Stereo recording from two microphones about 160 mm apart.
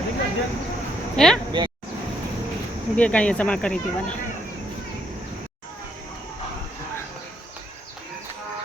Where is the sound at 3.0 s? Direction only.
10° left (ahead or behind).